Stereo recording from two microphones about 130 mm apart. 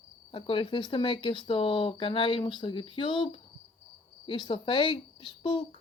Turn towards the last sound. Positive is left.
turn(degrees=45)  # may be behind; listen again after turning